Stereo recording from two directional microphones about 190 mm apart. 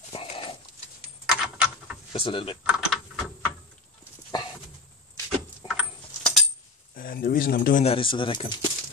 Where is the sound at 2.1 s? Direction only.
30° left (ahead or behind).